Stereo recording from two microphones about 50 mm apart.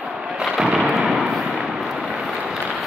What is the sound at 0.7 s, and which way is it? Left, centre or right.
Gunshot, centre.